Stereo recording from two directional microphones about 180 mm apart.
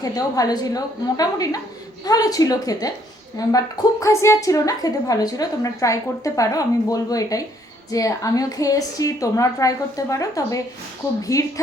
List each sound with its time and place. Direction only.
0.0 s a woman's voice: 20° left (ahead or behind)